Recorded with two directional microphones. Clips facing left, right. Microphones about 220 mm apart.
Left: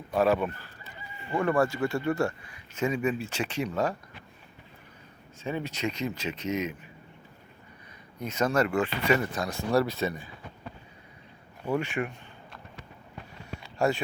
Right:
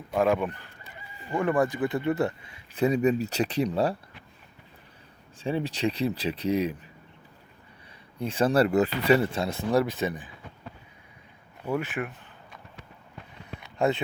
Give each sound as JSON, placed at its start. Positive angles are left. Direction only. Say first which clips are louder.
{"t": 0.1, "sound": "speech", "louder": "even", "side_deg": -10}
{"t": 1.5, "sound": "speech", "louder": "right 1 dB", "side_deg": -15}
{"t": 2.7, "sound": "speech", "louder": "right 5 dB", "side_deg": -35}
{"t": 5.4, "sound": "speech", "louder": "right 4 dB", "side_deg": -30}
{"t": 8.2, "sound": "speech", "louder": "right 3 dB", "side_deg": -30}
{"t": 11.8, "sound": "a sound", "louder": "left 1 dB", "side_deg": -5}
{"t": 13.6, "sound": "a sound", "louder": "right 1 dB", "side_deg": -20}